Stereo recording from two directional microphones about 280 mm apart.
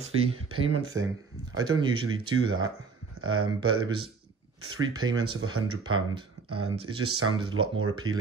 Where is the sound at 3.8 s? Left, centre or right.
Centre.